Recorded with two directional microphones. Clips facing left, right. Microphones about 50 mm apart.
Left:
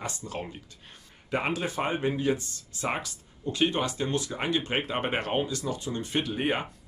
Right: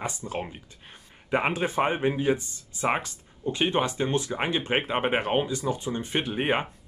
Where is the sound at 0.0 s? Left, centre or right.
Right.